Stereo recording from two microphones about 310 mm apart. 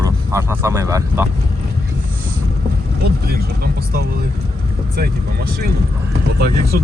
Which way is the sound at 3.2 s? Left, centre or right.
Right.